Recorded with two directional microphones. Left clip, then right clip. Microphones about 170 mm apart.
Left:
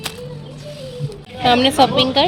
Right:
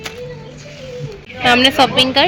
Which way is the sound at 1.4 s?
5° left (ahead or behind).